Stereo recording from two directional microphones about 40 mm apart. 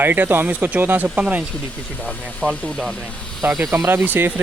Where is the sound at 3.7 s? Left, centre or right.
Right.